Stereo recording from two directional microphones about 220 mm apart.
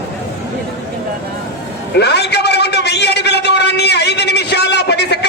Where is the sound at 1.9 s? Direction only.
50° left (ahead or behind).